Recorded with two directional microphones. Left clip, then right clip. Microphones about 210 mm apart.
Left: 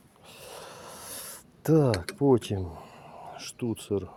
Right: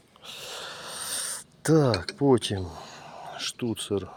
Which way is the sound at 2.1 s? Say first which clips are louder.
Even; centre (ahead or behind).